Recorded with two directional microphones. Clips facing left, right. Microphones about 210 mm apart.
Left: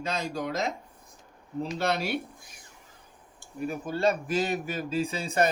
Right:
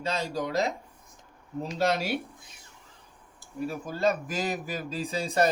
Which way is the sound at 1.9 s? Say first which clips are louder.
Right 1 dB; 40° right (ahead or behind).